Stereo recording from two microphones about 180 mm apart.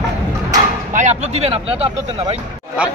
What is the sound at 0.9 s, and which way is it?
Speech, 40° right (ahead or behind).